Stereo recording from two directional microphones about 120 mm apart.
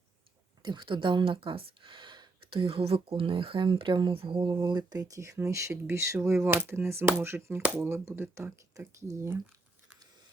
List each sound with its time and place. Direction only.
0.6 s speech: 40° right (ahead or behind); by 9.4 s 25° right (ahead or behind)